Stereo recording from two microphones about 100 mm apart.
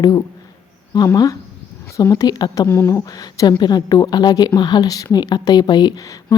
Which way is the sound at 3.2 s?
40° left (ahead or behind).